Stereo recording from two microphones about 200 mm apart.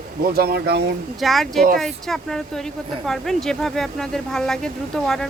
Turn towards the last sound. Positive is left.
turn(degrees=0)  # may be behind; listen again after turning